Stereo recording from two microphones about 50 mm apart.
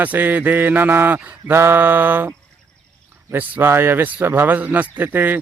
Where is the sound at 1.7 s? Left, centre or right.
Right.